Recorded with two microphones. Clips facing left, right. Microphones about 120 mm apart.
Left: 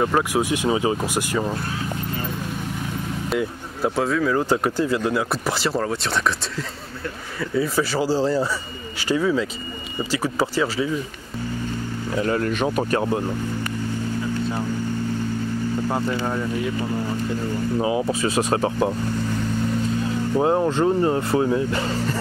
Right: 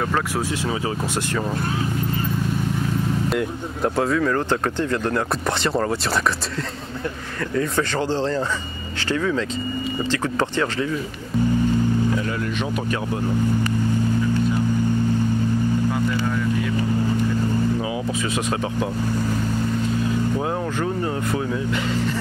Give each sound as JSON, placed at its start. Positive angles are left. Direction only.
{"t": 0.0, "sound": "speech", "side_deg": 15}
{"t": 3.3, "sound": "speech", "side_deg": 0}
{"t": 7.5, "sound": "speech", "side_deg": 5}
{"t": 12.2, "sound": "speech", "side_deg": 40}
{"t": 15.9, "sound": "speech", "side_deg": 35}
{"t": 17.7, "sound": "speech", "side_deg": 30}
{"t": 20.3, "sound": "speech", "side_deg": 30}